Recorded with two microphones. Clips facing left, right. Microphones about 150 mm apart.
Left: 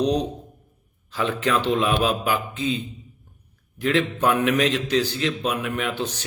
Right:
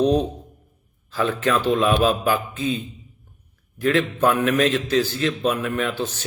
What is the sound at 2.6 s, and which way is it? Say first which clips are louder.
Speech: right 1 dB; 45° right (ahead or behind).